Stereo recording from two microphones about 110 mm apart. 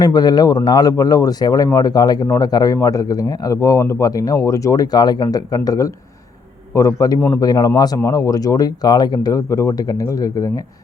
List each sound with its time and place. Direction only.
0.0 s speech: 40° left (ahead or behind)